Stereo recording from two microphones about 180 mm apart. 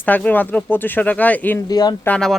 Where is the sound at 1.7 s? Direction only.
20° left (ahead or behind).